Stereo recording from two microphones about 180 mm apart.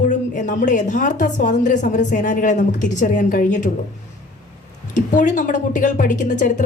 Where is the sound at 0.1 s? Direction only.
45° left (ahead or behind).